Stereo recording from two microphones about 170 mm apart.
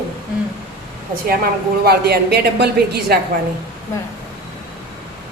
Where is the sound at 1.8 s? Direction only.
70° right (ahead or behind).